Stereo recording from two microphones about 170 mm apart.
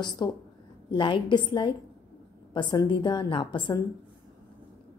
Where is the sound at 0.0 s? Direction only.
25° left (ahead or behind).